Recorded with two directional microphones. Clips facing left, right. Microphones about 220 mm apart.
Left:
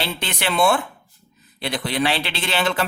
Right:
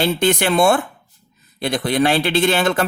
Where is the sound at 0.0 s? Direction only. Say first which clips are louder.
Right 9 dB; 45° right (ahead or behind).